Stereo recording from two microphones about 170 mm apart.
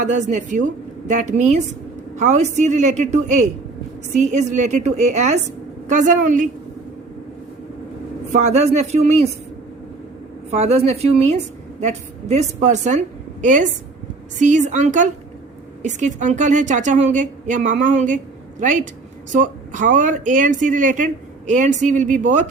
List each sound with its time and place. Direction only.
0.0 s speech: 45° right (ahead or behind)
8.3 s a man's voice: 40° right (ahead or behind)
10.5 s a man's voice: 40° right (ahead or behind)
19.3 s speech: 50° right (ahead or behind)